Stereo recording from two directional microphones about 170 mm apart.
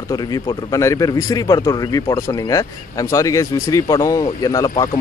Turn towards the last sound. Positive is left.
turn(degrees=20)  # may be behind; listen again after turning